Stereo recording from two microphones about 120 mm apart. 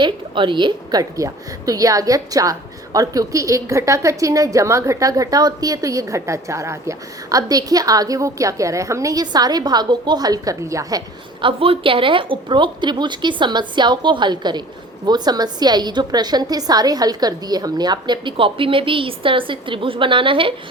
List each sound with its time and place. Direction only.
0.0 s a woman's voice: 40° right (ahead or behind)
11.3 s a woman's voice: 45° right (ahead or behind)